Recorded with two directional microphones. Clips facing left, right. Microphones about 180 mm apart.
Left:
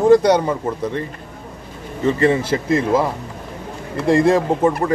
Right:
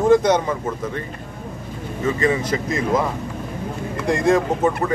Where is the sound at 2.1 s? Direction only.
30° left (ahead or behind).